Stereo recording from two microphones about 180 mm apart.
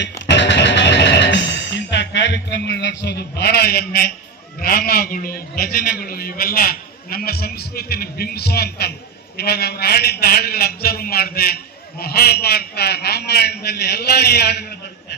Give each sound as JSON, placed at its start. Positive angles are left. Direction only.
{"t": 0.3, "sound": "music", "side_deg": 75}
{"t": 4.6, "sound": "a man's voice", "side_deg": 55}